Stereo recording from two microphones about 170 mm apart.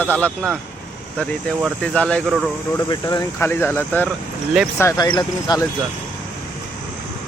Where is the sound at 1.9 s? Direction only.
5° left (ahead or behind).